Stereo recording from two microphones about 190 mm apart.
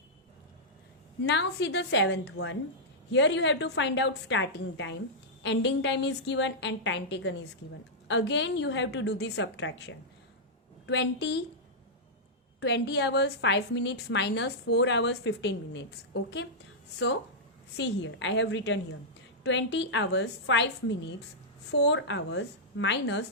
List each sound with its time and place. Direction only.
1.2 s a woman's voice: 65° left (ahead or behind)
12.5 s a woman's voice: 65° left (ahead or behind)
17.7 s a woman's voice: 70° left (ahead or behind)